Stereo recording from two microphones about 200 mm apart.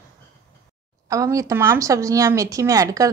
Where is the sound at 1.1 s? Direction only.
15° right (ahead or behind).